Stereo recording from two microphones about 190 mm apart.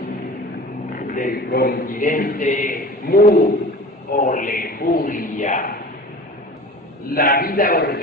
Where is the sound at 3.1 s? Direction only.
50° left (ahead or behind).